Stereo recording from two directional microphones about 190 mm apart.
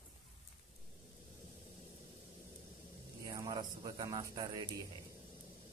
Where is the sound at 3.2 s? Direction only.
20° right (ahead or behind).